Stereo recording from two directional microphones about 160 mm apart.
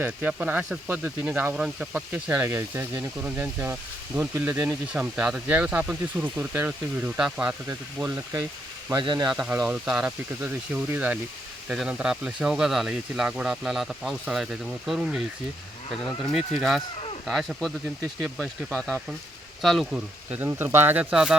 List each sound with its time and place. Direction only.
0.0 s speech: 10° right (ahead or behind)
8.9 s speech: 25° right (ahead or behind)
9.6 s speech: 5° right (ahead or behind)
16.6 s speech: centre (ahead or behind)
18.7 s speech: centre (ahead or behind)